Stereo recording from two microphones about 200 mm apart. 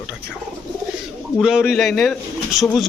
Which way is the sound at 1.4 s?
5° right (ahead or behind).